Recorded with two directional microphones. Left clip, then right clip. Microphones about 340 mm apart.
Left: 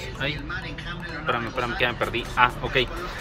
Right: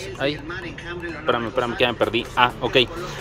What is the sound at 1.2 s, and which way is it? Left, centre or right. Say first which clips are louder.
Speech: right 4 dB; centre.